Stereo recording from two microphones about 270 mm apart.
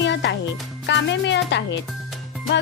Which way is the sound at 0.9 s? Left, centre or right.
Left.